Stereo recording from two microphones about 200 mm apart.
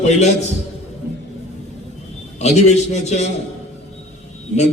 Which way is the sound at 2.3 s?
35° left (ahead or behind).